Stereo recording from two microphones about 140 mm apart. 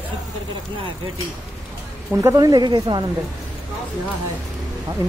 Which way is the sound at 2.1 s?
20° right (ahead or behind).